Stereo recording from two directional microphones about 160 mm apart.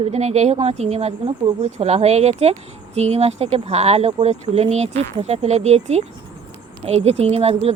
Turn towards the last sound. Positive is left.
turn(degrees=-40)  # may be behind; listen again after turning